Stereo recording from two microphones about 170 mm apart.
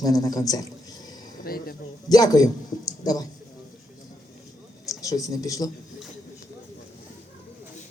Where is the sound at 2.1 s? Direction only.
20° left (ahead or behind).